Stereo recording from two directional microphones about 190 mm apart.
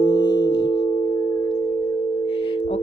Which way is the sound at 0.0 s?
20° left (ahead or behind).